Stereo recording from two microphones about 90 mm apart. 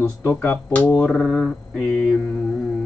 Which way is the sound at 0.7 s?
15° left (ahead or behind).